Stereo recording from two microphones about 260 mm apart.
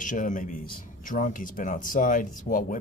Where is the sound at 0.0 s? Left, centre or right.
Left.